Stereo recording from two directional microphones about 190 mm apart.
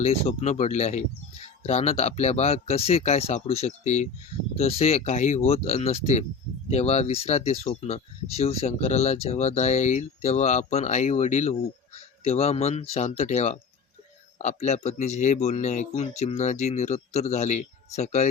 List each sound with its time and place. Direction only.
0.0 s speech: 35° left (ahead or behind)